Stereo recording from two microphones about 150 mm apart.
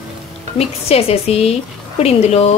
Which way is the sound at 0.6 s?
40° left (ahead or behind).